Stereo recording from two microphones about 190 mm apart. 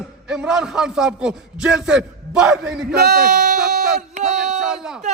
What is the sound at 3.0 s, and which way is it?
Speech, 55° right (ahead or behind).